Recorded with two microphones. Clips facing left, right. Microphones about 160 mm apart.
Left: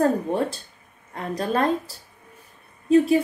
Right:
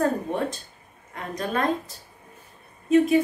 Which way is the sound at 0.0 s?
35° left (ahead or behind).